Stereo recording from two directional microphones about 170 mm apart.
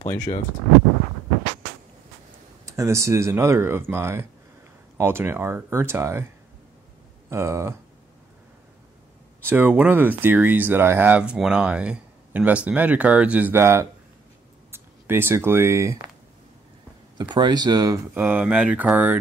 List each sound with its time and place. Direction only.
0.0 s speech: 15° left (ahead or behind)
2.6 s speech: 15° right (ahead or behind)
7.2 s speech: 15° right (ahead or behind)
9.5 s speech: 10° right (ahead or behind)
17.2 s speech: 25° right (ahead or behind)
18.1 s speech: 10° right (ahead or behind)